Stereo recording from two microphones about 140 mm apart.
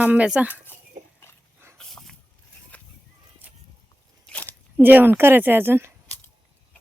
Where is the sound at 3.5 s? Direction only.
10° right (ahead or behind).